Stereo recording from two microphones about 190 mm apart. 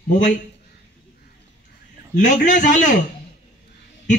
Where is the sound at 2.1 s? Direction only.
40° left (ahead or behind).